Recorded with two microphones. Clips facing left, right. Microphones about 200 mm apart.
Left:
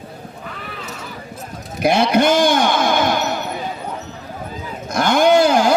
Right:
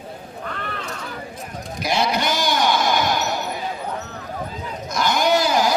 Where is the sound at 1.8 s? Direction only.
55° left (ahead or behind).